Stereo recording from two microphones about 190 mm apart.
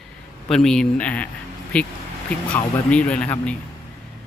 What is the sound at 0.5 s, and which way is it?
Speech, 5° left (ahead or behind).